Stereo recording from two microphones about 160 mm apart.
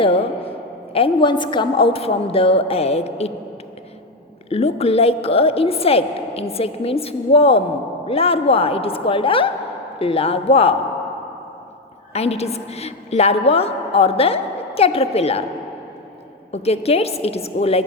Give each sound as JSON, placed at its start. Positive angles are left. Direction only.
{"t": 0.0, "sound": "a woman's voice", "side_deg": 35}
{"t": 4.4, "sound": "a woman's voice", "side_deg": 40}
{"t": 12.1, "sound": "a woman's voice", "side_deg": 40}
{"t": 16.5, "sound": "a woman's voice", "side_deg": 40}